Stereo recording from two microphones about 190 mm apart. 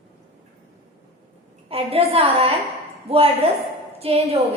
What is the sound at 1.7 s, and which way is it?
A woman's voice, 30° right (ahead or behind).